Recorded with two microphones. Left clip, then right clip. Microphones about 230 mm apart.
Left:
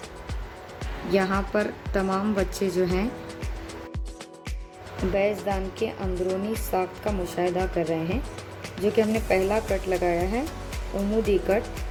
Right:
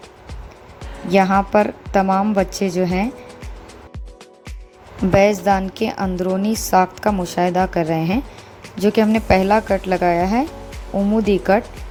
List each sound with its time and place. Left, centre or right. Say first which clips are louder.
1.1 s a woman's voice: right 10 dB; right
5.1 s a woman's voice: right 11 dB; right